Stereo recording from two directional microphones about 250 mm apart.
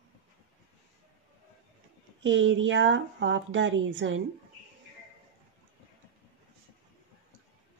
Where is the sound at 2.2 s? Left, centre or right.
Right.